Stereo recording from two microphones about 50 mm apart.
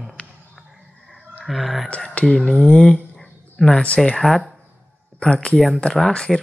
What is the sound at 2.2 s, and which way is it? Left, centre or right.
Speech, centre.